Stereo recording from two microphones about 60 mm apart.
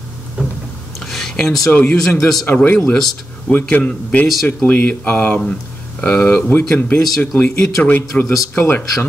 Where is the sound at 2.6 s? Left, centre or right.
Left.